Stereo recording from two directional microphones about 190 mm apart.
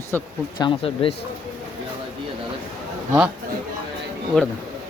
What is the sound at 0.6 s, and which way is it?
Speech, 30° left (ahead or behind).